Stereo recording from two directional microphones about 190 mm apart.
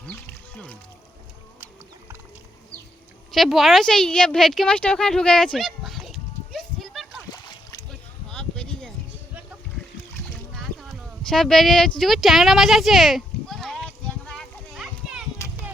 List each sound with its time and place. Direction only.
0.0 s boat: 5° left (ahead or behind)
3.3 s speech: centre (ahead or behind)
8.3 s a sound: 5° left (ahead or behind)
10.5 s horse: centre (ahead or behind)
11.9 s a sound: centre (ahead or behind)
15.4 s children playing: 15° left (ahead or behind)